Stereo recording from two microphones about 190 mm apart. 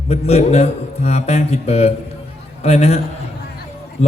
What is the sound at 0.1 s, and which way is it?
A man's voice, 35° left (ahead or behind).